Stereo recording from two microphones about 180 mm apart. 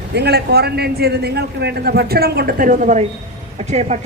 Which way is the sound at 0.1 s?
65° right (ahead or behind).